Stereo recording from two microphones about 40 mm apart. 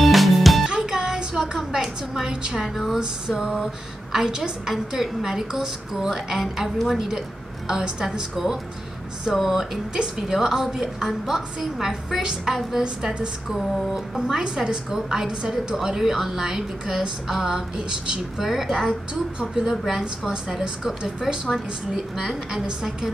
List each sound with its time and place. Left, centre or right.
0.0 s music: centre
0.7 s a sound: centre
2.7 s music: centre
3.0 s a woman's voice: centre
9.3 s music: centre
10.2 s a woman's voice: centre
13.6 s music: centre
14.3 s a woman's voice: centre
18.4 s a woman's voice: centre
21.9 s a woman's voice: centre